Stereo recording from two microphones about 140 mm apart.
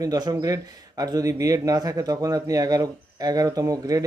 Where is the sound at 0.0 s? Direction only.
30° right (ahead or behind).